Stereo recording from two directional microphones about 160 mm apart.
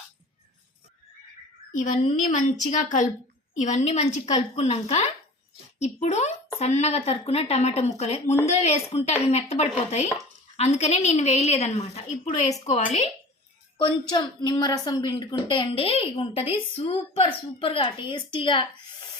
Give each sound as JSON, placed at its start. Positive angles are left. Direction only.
{"t": 1.7, "sound": "a woman's voice", "side_deg": 55}
{"t": 13.7, "sound": "a woman's voice", "side_deg": 25}